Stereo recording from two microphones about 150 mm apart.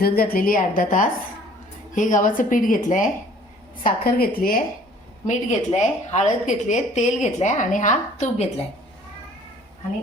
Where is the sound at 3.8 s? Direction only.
80° left.